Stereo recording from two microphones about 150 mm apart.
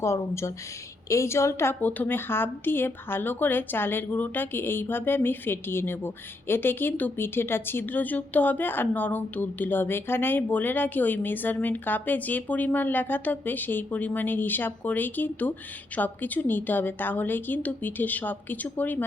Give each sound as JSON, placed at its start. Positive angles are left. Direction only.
{"t": 0.0, "sound": "a woman's voice", "side_deg": 20}